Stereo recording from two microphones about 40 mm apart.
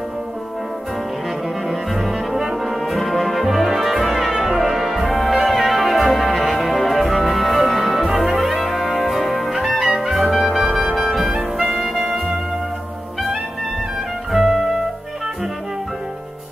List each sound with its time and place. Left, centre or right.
1.7 s brass instrument: centre
10.3 s music: centre
14.3 s music: centre